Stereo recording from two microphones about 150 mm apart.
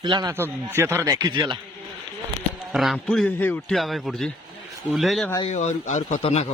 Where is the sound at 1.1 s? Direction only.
25° right (ahead or behind).